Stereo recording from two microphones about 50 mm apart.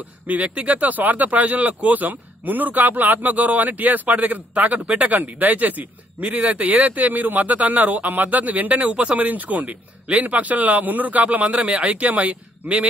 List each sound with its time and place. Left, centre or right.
0.3 s a man's voice: right